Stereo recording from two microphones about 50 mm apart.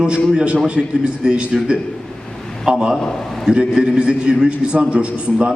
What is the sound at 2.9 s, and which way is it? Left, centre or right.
Speech, centre.